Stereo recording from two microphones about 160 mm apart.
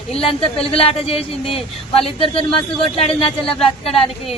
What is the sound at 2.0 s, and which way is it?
Speech, 35° left (ahead or behind).